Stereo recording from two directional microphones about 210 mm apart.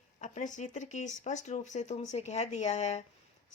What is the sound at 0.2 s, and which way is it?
Speech, 35° left (ahead or behind).